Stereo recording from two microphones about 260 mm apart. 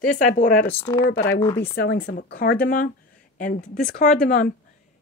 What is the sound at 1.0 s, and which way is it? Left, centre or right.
Speech, left.